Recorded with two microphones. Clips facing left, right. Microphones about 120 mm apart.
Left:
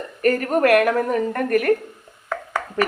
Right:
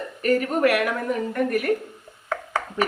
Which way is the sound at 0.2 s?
50° left (ahead or behind).